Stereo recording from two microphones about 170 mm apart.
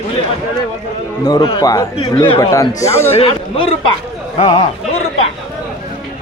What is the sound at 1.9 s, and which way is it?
Speech, 35° left (ahead or behind).